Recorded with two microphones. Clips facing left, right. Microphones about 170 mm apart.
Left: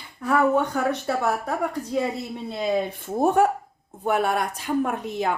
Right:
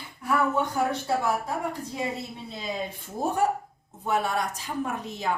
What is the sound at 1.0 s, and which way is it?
Speech, 65° left (ahead or behind).